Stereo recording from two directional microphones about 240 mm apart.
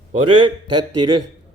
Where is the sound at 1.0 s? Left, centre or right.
Right.